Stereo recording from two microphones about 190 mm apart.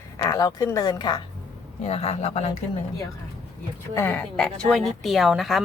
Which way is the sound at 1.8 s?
35° left (ahead or behind).